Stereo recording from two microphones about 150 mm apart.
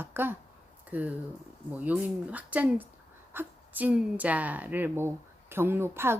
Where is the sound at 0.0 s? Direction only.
15° right (ahead or behind).